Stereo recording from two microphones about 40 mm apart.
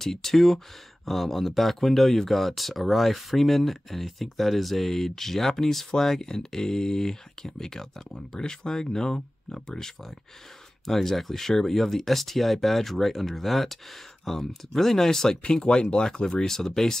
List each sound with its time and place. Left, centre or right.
0.0 s speech: centre